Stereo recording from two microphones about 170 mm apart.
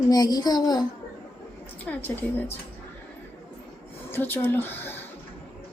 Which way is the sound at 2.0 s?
10° left (ahead or behind).